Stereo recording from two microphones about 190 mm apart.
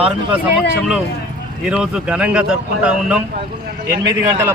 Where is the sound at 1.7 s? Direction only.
5° right (ahead or behind).